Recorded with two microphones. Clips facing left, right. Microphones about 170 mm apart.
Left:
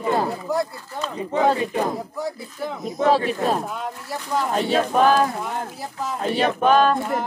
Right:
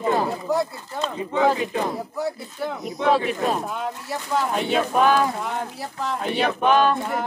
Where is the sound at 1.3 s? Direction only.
40° left (ahead or behind).